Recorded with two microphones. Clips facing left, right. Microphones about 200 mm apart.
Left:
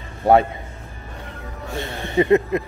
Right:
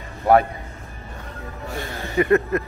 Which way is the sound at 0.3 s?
30° left (ahead or behind).